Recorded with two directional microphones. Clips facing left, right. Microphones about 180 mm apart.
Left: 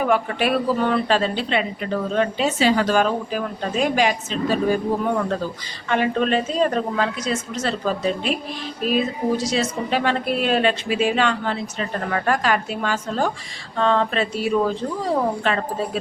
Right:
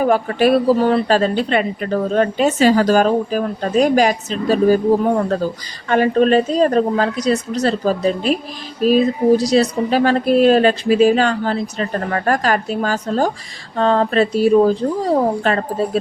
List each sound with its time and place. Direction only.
0.0 s a woman's voice: 40° right (ahead or behind)